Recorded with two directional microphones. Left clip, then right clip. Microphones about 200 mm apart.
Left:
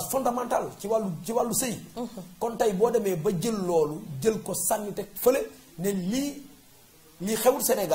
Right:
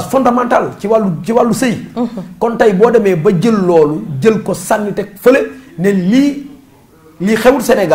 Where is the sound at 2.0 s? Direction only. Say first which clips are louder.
Right 17 dB; 35° right (ahead or behind).